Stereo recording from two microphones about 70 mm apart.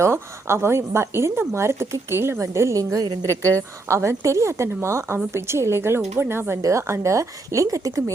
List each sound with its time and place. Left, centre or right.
0.0 s a woman's voice: right
3.8 s a woman's voice: right
6.6 s speech: right